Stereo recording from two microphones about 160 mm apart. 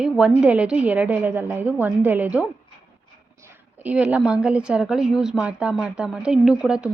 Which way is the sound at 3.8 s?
10° right (ahead or behind).